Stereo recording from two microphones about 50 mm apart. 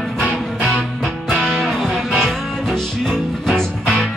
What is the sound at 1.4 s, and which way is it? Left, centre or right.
Music, centre.